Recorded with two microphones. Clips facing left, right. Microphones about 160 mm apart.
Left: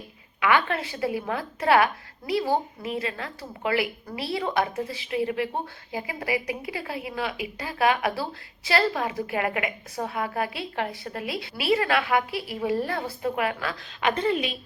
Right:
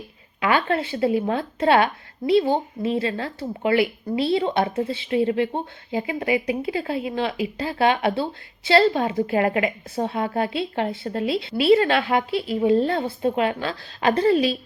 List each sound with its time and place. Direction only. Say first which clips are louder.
0.3 s a woman's voice: right 2 dB; 30° right (ahead or behind)